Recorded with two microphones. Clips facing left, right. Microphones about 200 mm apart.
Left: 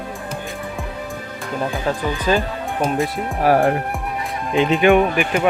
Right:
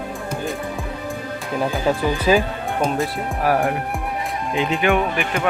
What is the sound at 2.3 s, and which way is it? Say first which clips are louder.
Speech: right 2 dB; 5° right (ahead or behind).